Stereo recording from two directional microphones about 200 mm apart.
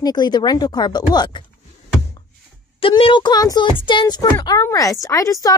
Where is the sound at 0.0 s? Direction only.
20° left (ahead or behind).